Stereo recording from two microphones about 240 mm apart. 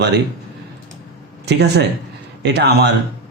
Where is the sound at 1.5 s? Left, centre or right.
Right.